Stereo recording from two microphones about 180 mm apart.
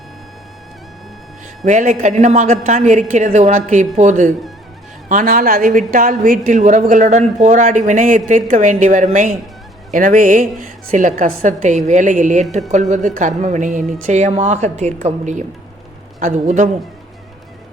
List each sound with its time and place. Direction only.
1.6 s a woman's voice: 45° right (ahead or behind)